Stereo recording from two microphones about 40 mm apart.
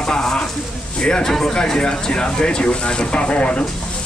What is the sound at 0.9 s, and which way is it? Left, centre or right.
Speech, left.